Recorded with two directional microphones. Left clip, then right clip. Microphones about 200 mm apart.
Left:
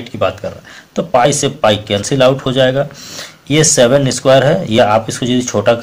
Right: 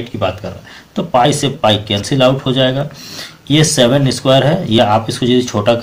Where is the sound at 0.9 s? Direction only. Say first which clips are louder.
Left 1 dB; 30° left (ahead or behind).